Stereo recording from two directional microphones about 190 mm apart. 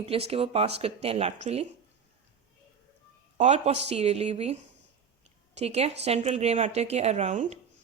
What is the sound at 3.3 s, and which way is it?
A woman's voice, 35° right (ahead or behind).